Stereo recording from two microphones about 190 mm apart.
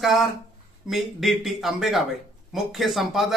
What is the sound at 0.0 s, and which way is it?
Speech, centre (ahead or behind).